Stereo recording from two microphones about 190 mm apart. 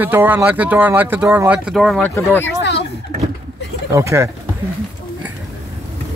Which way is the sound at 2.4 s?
70° left (ahead or behind).